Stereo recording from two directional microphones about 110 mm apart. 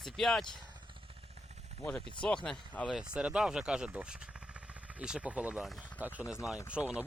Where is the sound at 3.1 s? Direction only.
10° right (ahead or behind).